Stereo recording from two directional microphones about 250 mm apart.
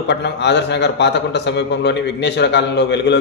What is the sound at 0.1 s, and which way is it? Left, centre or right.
A man's voice, left.